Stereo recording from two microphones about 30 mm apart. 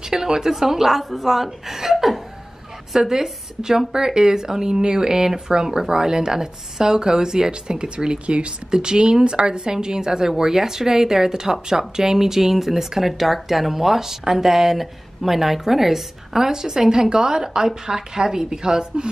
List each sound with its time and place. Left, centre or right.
0.1 s a woman's voice: centre